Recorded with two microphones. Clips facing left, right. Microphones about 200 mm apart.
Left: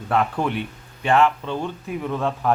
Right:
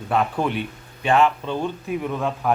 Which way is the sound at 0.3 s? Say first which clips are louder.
Right 1 dB; 20° right (ahead or behind).